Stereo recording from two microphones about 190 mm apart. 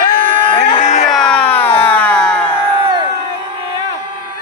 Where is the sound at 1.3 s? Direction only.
5° left (ahead or behind).